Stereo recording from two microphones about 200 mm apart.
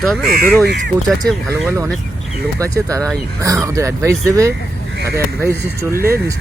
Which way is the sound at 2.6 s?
15° right (ahead or behind).